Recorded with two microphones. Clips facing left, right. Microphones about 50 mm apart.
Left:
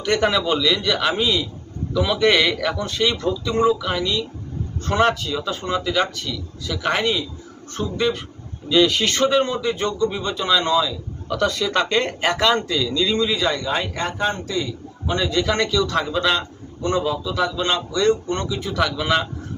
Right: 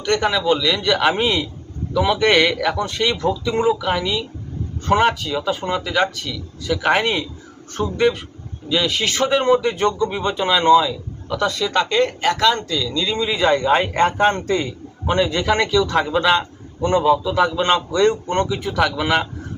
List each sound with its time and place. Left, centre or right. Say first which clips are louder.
0.0 s a man's voice: right 1 dB; centre
0.9 s a man's voice: right 3 dB; right
2.1 s a man's voice: even; centre
3.2 s a man's voice: even; centre
7.8 s speech: right 3 dB; right
8.7 s a man's voice: left 3 dB; centre; by 10.9 s right
11.4 s speech: right 1 dB; centre
13.1 s a man's voice: left 1 dB; centre
13.4 s a man's voice: right 6 dB; right
15.0 s a man's voice: right 3 dB; right
18.9 s a man's voice: right 2 dB; centre